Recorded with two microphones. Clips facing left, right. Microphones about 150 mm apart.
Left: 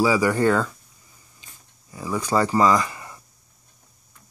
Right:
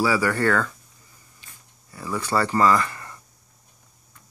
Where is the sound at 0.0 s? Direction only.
15° left (ahead or behind).